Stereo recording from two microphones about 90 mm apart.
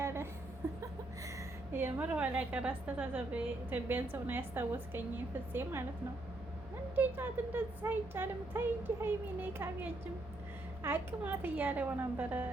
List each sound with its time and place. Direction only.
0.0 s a sound: 30° right (ahead or behind)
1.7 s a woman's voice: 20° right (ahead or behind)
6.9 s a woman's voice: 20° right (ahead or behind)
10.8 s a woman's voice: 20° right (ahead or behind)